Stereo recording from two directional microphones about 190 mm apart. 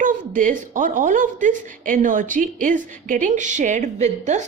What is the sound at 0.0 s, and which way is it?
A woman's voice, 45° right (ahead or behind).